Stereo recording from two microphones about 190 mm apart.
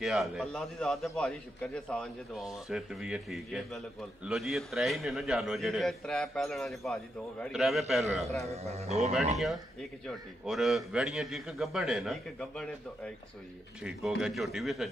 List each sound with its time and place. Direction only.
0.0 s a man's voice: centre (ahead or behind)
8.5 s speech: 35° right (ahead or behind)
9.4 s a man's voice: centre (ahead or behind)
14.2 s a man's voice: centre (ahead or behind)